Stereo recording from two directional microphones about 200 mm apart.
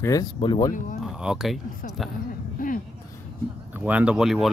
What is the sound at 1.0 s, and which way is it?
Speech, 5° right (ahead or behind).